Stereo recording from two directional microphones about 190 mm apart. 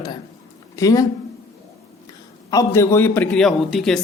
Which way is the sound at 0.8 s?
20° left (ahead or behind).